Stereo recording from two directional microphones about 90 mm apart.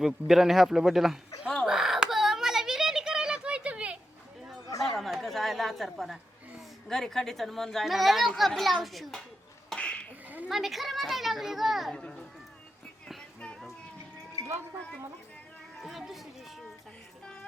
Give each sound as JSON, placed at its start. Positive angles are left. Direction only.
{"t": 0.0, "sound": "speech", "side_deg": -5}
{"t": 1.6, "sound": "a sound", "side_deg": -5}
{"t": 4.9, "sound": "a sound", "side_deg": 0}
{"t": 6.8, "sound": "speech", "side_deg": 5}
{"t": 9.6, "sound": "cough", "side_deg": 10}
{"t": 10.5, "sound": "speech", "side_deg": 0}
{"t": 11.9, "sound": "speech", "side_deg": 10}
{"t": 13.4, "sound": "child singing", "side_deg": 10}
{"t": 15.8, "sound": "speech", "side_deg": 0}